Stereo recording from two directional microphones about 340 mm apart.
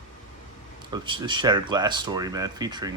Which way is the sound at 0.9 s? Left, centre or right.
Centre.